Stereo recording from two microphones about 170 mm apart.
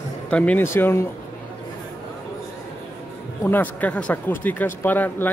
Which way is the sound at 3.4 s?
10° left (ahead or behind).